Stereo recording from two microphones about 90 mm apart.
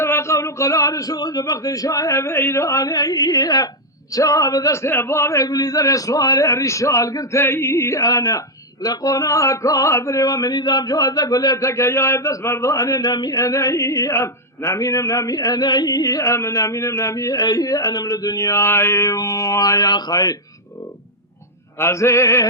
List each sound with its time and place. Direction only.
0.0 s a man's voice: 30° left (ahead or behind)
4.8 s a man's voice: 25° left (ahead or behind)
19.0 s music: 40° left (ahead or behind)
21.8 s a man's voice: 30° left (ahead or behind)